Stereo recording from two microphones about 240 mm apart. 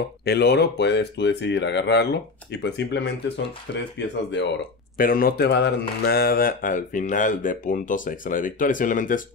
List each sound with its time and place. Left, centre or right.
0.2 s speech: left
4.9 s speech: left